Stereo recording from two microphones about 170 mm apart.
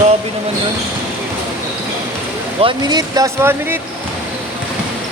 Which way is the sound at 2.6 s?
25° right (ahead or behind).